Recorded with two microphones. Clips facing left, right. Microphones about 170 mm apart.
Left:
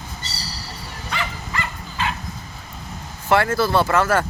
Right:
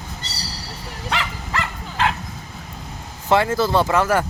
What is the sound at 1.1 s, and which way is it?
Bow-wow, 85° right.